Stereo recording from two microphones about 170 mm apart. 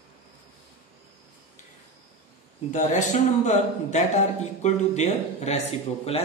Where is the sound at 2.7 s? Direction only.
45° left (ahead or behind).